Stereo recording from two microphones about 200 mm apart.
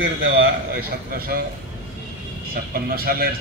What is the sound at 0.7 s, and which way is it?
Speech, 50° right (ahead or behind).